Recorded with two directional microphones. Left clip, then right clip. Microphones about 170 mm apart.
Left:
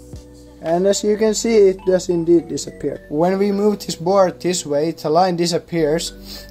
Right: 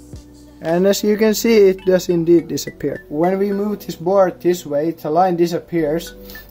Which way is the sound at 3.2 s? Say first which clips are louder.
Left 1 dB; 25° left (ahead or behind).